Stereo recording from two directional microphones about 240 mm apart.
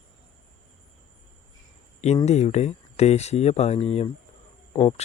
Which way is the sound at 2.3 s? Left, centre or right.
Left.